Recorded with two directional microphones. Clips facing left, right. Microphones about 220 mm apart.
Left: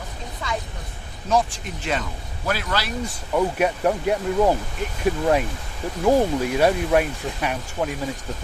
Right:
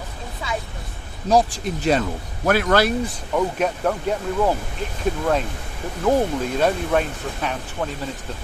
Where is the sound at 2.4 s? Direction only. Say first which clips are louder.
Right 8 dB; 55° right (ahead or behind).